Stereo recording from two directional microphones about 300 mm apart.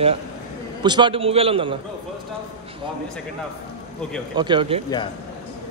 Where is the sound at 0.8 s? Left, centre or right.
Centre.